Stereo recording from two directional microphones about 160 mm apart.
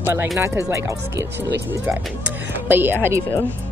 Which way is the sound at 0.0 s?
15° right (ahead or behind).